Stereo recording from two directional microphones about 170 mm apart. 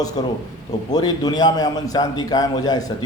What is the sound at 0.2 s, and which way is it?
A man's voice, 25° left (ahead or behind).